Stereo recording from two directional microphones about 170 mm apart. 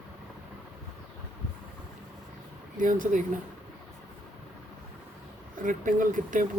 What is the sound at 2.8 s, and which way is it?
Speech, 50° right (ahead or behind).